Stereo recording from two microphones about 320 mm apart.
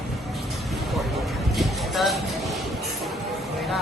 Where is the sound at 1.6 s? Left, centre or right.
Centre.